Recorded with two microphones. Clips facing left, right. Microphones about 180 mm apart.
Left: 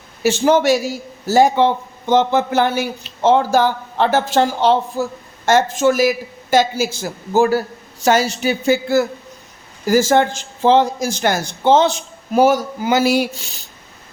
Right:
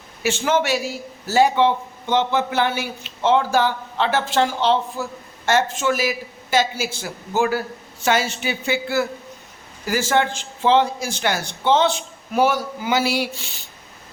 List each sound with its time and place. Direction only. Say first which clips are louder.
0.2 s a man's voice: left 6 dB; 40° left (ahead or behind)